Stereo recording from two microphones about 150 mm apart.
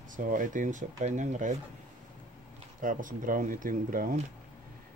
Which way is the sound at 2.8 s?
65° right (ahead or behind).